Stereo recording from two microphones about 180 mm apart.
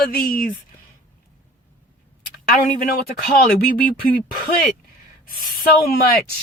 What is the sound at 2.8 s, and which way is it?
Speech, 50° left (ahead or behind).